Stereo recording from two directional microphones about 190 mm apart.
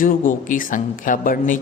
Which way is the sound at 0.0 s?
45° left (ahead or behind).